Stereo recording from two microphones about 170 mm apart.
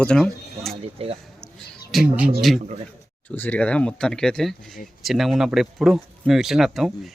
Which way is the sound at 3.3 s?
10° left (ahead or behind).